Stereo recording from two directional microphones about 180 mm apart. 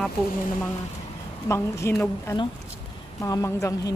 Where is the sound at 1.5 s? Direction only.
15° left (ahead or behind).